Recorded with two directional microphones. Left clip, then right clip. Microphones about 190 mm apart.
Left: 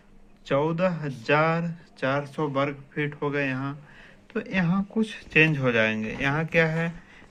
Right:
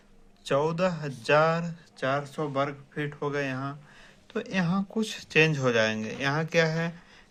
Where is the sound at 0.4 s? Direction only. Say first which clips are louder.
Left 1 dB; 45° right (ahead or behind).